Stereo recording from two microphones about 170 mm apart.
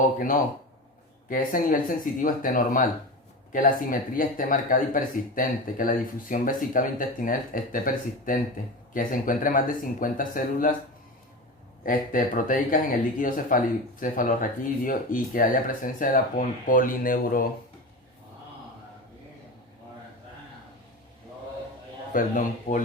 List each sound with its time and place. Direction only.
0.0 s speech: 50° left (ahead or behind)
11.8 s speech: 50° left (ahead or behind)
22.1 s speech: 50° left (ahead or behind)